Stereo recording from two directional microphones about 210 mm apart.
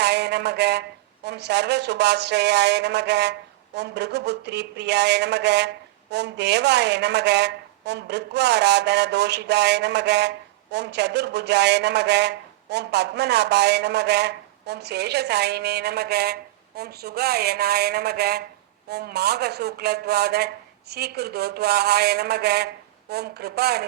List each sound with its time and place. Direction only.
0.0 s speech: 55° right (ahead or behind)